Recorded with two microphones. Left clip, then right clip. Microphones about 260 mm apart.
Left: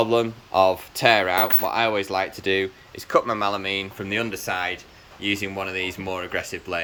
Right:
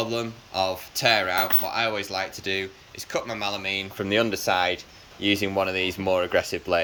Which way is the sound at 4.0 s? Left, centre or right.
Centre.